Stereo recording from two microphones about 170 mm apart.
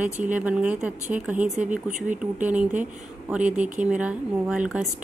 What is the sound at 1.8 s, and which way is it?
Speech, 45° right (ahead or behind).